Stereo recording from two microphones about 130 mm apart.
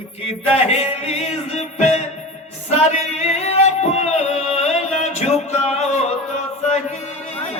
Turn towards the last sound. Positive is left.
turn(degrees=60)  # may be behind; listen again after turning